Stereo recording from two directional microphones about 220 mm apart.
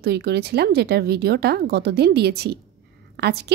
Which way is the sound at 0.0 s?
45° right (ahead or behind).